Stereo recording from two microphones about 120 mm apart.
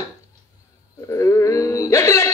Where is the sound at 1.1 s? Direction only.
25° left (ahead or behind).